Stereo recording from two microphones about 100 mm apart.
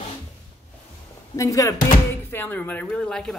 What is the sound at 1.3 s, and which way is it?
Speech, 35° left (ahead or behind).